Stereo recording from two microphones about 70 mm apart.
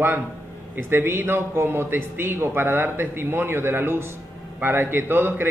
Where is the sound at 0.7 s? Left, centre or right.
Right.